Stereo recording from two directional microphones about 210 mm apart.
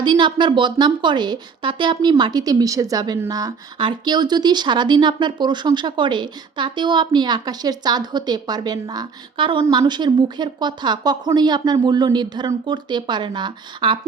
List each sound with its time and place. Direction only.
0.0 s a woman's voice: 20° right (ahead or behind)